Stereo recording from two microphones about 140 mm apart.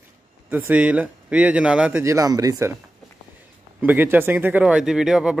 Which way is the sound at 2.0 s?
25° right (ahead or behind).